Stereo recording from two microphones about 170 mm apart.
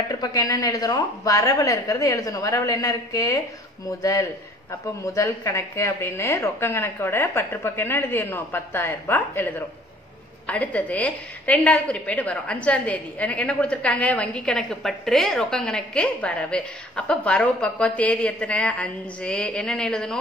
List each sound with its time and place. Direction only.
0.1 s a woman's voice: 20° left (ahead or behind); by 20.2 s 5° left (ahead or behind)